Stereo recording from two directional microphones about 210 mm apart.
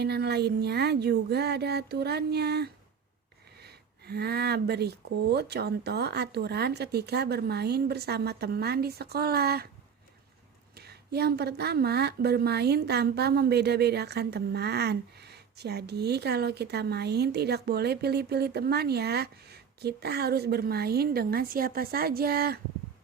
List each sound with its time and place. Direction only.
0.0 s a woman's voice: 50° right (ahead or behind)
10.8 s a woman's voice: 50° right (ahead or behind)